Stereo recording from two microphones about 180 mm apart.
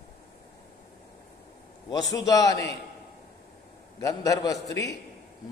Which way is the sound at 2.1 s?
20° left (ahead or behind).